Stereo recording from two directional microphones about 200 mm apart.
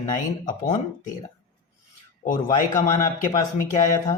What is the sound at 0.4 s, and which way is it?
Speech, 40° left (ahead or behind).